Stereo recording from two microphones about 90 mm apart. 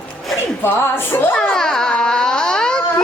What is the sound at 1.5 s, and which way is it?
Speech, 5° left (ahead or behind).